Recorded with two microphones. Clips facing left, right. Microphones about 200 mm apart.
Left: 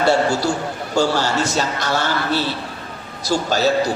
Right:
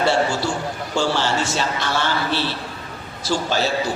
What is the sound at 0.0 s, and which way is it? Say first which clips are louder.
A man's voice: left 3 dB; 40° left (ahead or behind).